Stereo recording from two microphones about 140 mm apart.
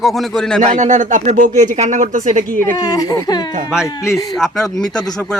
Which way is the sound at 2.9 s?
25° left (ahead or behind).